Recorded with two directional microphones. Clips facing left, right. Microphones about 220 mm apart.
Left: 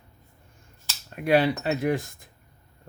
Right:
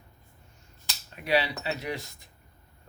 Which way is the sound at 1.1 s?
50° left (ahead or behind).